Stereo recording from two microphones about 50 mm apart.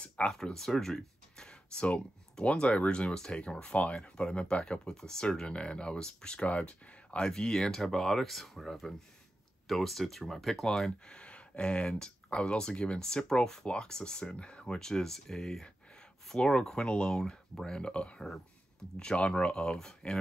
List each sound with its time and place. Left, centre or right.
0.3 s speech: centre
6.4 s speech: left; by 10.9 s centre
11.1 s speech: left